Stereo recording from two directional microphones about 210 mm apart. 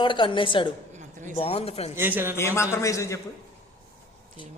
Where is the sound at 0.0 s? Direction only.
25° left (ahead or behind).